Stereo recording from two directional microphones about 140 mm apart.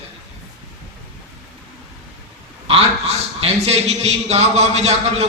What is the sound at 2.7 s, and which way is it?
A man's voice, 45° right (ahead or behind).